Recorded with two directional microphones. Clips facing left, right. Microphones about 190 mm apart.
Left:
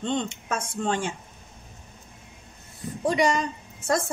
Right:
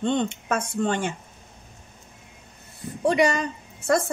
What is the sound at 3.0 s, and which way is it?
Speech, 60° right (ahead or behind).